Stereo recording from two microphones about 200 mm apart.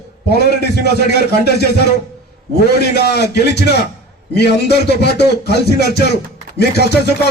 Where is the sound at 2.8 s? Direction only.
55° left (ahead or behind).